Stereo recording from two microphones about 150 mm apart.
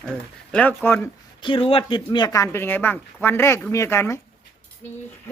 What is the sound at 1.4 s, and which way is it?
A man's voice, 35° left (ahead or behind).